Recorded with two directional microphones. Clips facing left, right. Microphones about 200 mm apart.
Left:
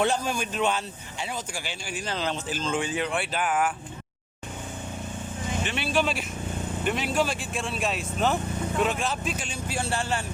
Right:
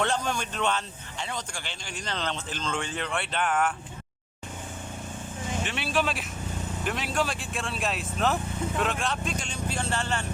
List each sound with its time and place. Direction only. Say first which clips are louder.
0.0 s speech: left 2 dB; 10° left (ahead or behind)
5.6 s speech: left 2 dB; centre (ahead or behind)